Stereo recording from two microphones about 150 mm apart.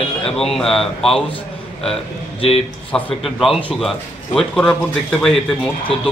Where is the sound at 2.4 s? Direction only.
40° left (ahead or behind).